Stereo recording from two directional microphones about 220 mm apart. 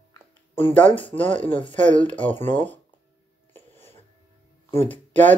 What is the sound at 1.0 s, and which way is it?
Speech, 25° left (ahead or behind).